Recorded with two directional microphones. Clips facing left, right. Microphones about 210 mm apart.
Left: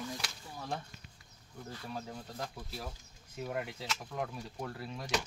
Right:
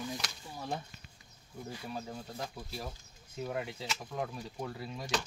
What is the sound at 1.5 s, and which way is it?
Speech, 10° right (ahead or behind).